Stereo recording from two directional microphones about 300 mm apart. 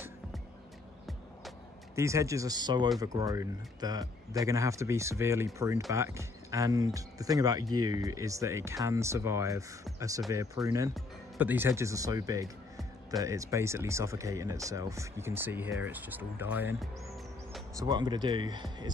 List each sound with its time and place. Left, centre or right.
2.0 s speech: centre
17.7 s speech: centre